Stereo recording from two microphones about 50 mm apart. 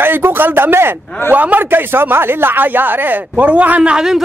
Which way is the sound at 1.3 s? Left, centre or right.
Right.